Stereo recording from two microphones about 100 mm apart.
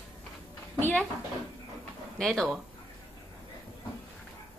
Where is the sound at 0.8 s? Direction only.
15° left (ahead or behind).